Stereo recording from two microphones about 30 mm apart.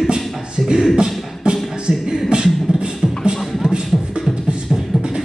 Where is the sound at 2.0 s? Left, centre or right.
Right.